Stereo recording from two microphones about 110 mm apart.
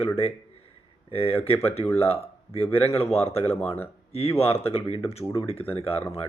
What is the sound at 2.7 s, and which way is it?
Speech, 65° left (ahead or behind).